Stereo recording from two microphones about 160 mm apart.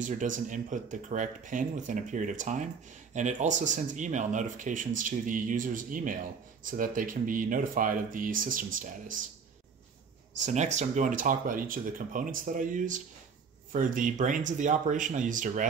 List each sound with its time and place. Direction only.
0.0 s speech: 55° right (ahead or behind)
10.4 s speech: 45° right (ahead or behind)